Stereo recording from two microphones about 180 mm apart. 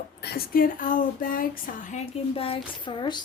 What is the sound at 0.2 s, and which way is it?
Speech, 60° left (ahead or behind).